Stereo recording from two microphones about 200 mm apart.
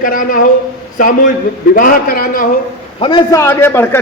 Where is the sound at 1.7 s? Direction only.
45° left (ahead or behind).